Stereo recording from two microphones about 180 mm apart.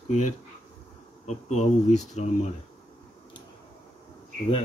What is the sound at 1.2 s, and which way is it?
Speech, 40° left (ahead or behind).